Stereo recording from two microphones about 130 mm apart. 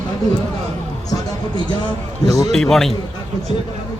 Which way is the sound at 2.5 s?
Centre (ahead or behind).